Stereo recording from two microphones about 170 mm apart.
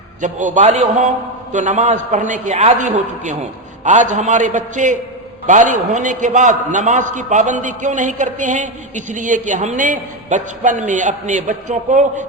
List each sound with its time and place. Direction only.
0.2 s a man's voice: 45° right (ahead or behind)